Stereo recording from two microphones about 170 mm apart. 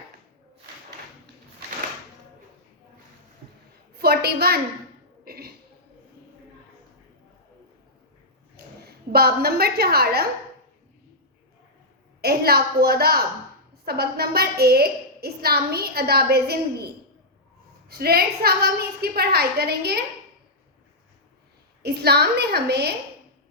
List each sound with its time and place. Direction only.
3.9 s a woman's voice: 65° right (ahead or behind)
5.2 s cough: 65° right (ahead or behind)
8.6 s a sound: 70° right (ahead or behind)
9.1 s a woman's voice: 65° right (ahead or behind)
12.2 s a woman's voice: 65° right (ahead or behind)
21.8 s a woman's voice: 70° right (ahead or behind)